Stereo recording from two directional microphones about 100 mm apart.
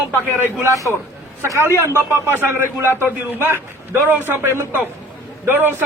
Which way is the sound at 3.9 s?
20° right (ahead or behind).